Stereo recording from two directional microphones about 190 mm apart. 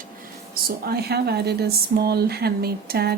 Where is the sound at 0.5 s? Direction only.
55° right (ahead or behind).